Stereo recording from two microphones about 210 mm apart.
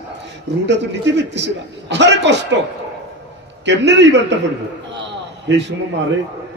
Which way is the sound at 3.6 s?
55° right (ahead or behind).